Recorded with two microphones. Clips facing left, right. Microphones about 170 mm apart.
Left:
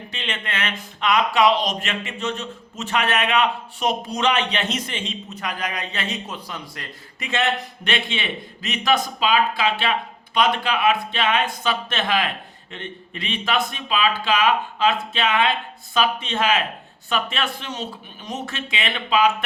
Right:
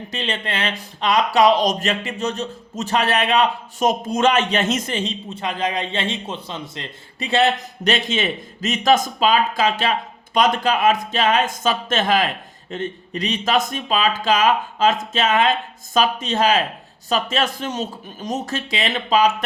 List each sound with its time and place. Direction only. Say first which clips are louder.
0.1 s speech: right 4 dB; 35° right (ahead or behind)